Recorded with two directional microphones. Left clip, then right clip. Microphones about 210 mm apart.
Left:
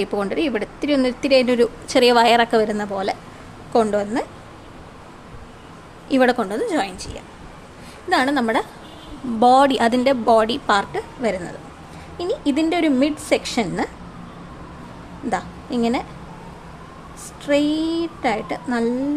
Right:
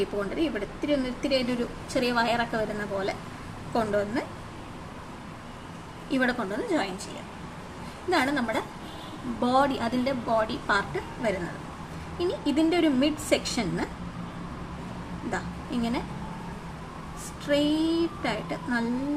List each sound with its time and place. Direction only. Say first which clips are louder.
0.0 s speech: left 7 dB; 45° left (ahead or behind)
6.1 s speech: left 10 dB; 50° left (ahead or behind)
8.1 s speech: left 8 dB; 50° left (ahead or behind)
15.3 s a woman's voice: left 9 dB; 45° left (ahead or behind)
17.4 s a woman's voice: left 6 dB; 40° left (ahead or behind)